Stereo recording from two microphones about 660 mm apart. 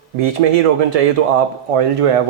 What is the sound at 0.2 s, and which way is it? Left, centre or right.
Speech, right.